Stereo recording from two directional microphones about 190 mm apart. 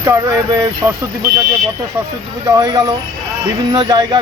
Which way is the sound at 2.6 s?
20° right (ahead or behind).